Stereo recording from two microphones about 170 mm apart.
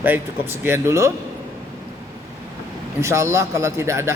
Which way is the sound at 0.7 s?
15° right (ahead or behind).